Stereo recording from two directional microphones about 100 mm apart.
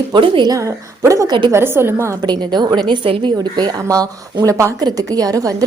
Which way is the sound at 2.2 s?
45° right (ahead or behind).